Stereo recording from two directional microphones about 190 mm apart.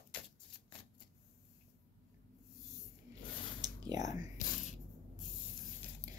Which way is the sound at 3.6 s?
20° right (ahead or behind).